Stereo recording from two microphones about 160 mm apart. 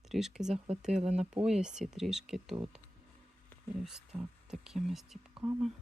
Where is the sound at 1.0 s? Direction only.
45° right (ahead or behind).